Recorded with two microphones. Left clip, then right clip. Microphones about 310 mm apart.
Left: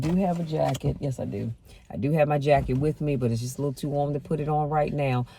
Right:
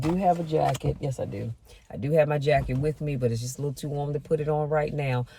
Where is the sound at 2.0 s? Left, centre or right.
Centre.